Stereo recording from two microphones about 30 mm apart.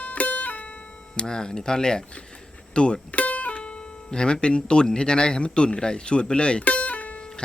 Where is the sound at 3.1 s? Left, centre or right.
Left.